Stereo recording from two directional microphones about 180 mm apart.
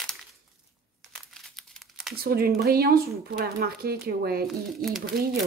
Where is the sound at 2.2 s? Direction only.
55° right (ahead or behind).